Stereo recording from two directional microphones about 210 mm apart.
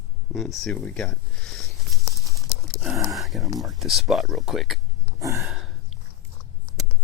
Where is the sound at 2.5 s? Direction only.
Centre (ahead or behind).